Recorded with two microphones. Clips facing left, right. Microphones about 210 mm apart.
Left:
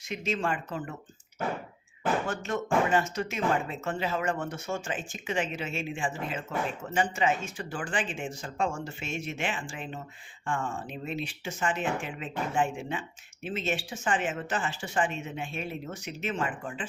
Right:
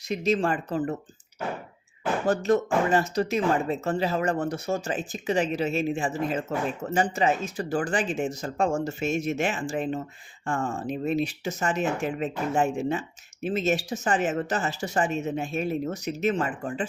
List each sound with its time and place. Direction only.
0.1 s speech: 35° right (ahead or behind)
2.2 s speech: 35° right (ahead or behind)